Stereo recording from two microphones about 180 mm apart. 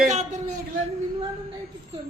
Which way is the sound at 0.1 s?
40° right (ahead or behind).